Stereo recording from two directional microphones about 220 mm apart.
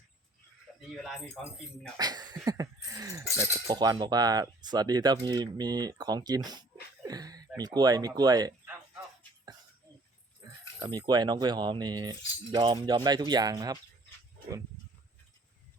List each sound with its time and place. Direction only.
0.8 s speech: centre (ahead or behind)
2.0 s speech: 20° right (ahead or behind)
10.8 s speech: 20° right (ahead or behind)